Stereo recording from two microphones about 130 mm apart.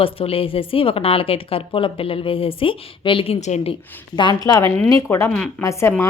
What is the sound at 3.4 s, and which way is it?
Speech, 55° left (ahead or behind).